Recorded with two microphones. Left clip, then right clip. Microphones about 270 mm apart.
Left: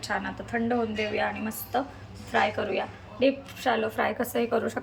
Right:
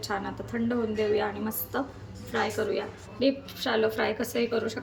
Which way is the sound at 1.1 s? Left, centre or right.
Centre.